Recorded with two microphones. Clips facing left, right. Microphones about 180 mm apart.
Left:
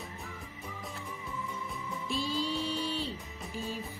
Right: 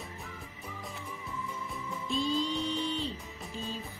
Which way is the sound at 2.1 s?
5° left (ahead or behind).